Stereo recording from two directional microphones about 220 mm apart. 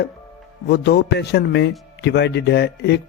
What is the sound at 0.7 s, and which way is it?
Speech, 45° left (ahead or behind).